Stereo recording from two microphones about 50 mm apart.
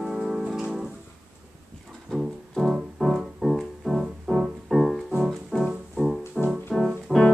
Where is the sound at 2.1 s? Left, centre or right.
Centre.